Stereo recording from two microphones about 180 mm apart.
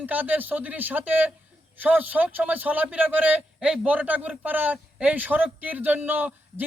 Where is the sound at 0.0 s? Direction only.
10° right (ahead or behind).